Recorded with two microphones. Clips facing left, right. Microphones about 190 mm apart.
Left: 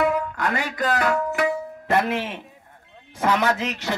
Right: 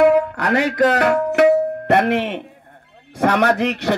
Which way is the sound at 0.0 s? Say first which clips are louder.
Right 8 dB; 65° right (ahead or behind).